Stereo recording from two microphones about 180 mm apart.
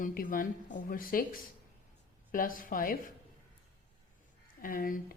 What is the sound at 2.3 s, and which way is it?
Speech, 50° left (ahead or behind).